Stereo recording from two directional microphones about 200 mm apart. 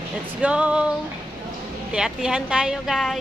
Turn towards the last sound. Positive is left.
turn(degrees=0)  # may be behind; listen again after turning